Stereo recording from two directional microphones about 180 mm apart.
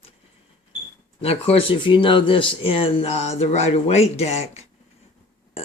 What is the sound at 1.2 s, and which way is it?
Speech, 35° left (ahead or behind).